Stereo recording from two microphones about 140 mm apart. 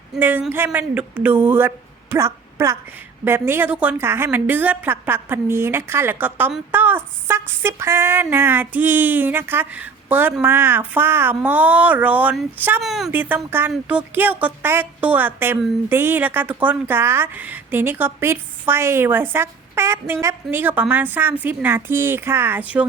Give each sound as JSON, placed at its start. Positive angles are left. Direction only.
{"t": 0.2, "sound": "a woman's voice", "side_deg": -15}
{"t": 12.8, "sound": "a woman's voice", "side_deg": 0}
{"t": 13.1, "sound": "a woman's voice", "side_deg": -15}